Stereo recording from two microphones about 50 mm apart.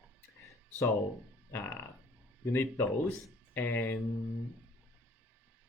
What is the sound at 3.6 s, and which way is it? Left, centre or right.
Speech, left.